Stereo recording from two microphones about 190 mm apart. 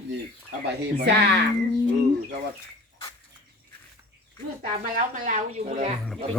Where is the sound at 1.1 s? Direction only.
65° right (ahead or behind).